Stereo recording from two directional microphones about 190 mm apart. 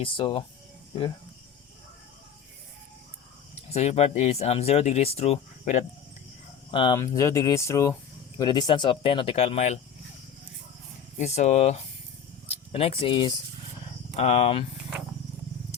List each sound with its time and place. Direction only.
0.0 s speech: 25° left (ahead or behind)
3.7 s speech: 35° left (ahead or behind)
6.7 s speech: 25° left (ahead or behind)
11.2 s speech: 35° left (ahead or behind)